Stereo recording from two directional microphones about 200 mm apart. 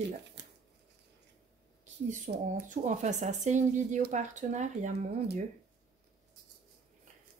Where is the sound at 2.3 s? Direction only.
45° right (ahead or behind).